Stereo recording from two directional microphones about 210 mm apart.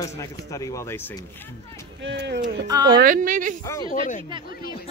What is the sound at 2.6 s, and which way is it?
Speech, 20° right (ahead or behind).